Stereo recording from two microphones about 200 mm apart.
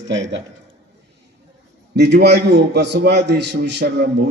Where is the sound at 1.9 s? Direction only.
60° right (ahead or behind).